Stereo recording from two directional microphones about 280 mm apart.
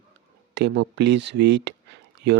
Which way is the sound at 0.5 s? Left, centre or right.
Right.